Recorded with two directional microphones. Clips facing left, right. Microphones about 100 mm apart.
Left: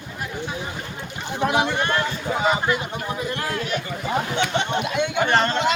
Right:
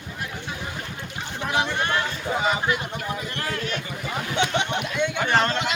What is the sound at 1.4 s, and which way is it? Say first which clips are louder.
Speech: left 4 dB; 15° left (ahead or behind).